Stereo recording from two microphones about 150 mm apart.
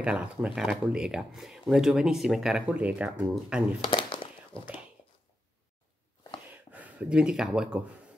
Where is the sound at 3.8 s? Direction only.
35° left (ahead or behind).